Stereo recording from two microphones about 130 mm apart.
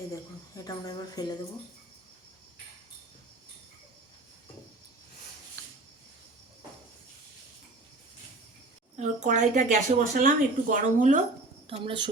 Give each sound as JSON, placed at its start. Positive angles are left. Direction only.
{"t": 0.5, "sound": "a woman's voice", "side_deg": 30}
{"t": 9.0, "sound": "speech", "side_deg": -70}
{"t": 11.7, "sound": "a woman's voice", "side_deg": -40}